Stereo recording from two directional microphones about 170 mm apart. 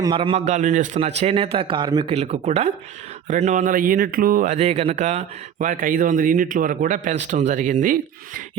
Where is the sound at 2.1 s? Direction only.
40° right (ahead or behind).